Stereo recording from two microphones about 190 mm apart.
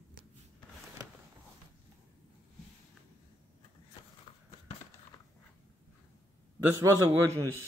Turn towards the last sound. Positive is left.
turn(degrees=-20)  # may be behind; listen again after turning